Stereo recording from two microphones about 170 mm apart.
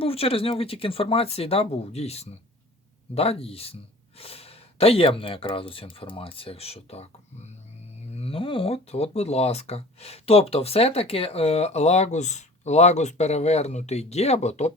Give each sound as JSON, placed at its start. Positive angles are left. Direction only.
{"t": 0.0, "sound": "speech", "side_deg": 35}
{"t": 8.1, "sound": "speech", "side_deg": 35}